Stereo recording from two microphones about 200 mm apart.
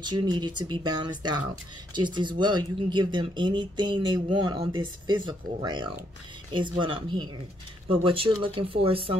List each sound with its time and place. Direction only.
0.0 s speech: 20° right (ahead or behind)